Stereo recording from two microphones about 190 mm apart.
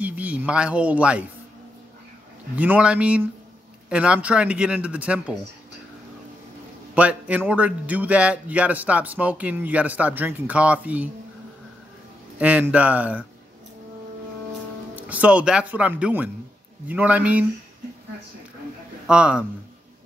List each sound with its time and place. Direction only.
0.0 s speech: 10° right (ahead or behind)
2.5 s speech: 10° right (ahead or behind)
7.0 s speech: 10° right (ahead or behind)
12.4 s speech: 10° right (ahead or behind)
15.0 s speech: 5° right (ahead or behind)
19.0 s a man's voice: 5° right (ahead or behind)